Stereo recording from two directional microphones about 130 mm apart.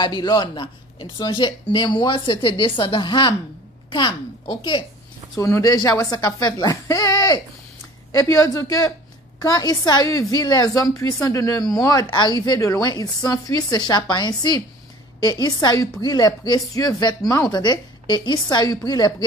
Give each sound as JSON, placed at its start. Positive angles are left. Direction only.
{"t": 0.0, "sound": "a woman's voice", "side_deg": 35}
{"t": 5.4, "sound": "a woman's voice", "side_deg": 25}